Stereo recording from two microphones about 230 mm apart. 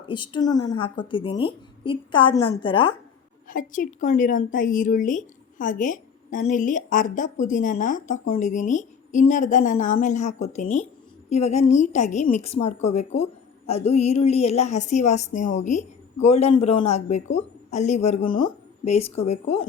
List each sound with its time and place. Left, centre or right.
0.0 s a woman's voice: left
3.5 s a woman's voice: left